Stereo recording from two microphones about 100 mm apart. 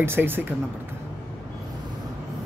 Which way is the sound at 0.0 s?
20° right (ahead or behind).